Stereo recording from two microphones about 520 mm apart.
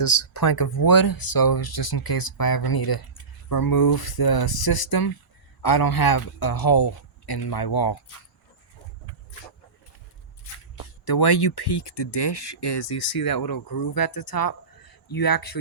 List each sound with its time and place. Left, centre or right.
0.0 s speech: left
11.0 s speech: left